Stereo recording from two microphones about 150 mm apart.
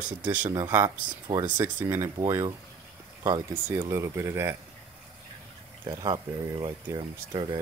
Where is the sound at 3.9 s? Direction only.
20° right (ahead or behind).